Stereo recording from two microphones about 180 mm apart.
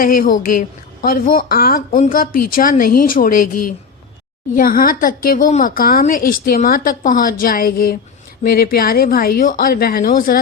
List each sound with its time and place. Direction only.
0.0 s a woman's voice: 50° left (ahead or behind)